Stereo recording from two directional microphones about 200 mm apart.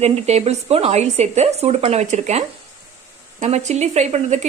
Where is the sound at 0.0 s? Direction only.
30° right (ahead or behind).